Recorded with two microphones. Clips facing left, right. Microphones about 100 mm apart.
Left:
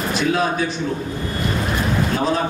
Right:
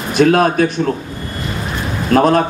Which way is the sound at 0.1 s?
60° right (ahead or behind).